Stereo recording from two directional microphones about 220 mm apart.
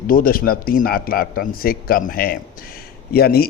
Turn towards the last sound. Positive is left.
turn(degrees=45)  # may be behind; listen again after turning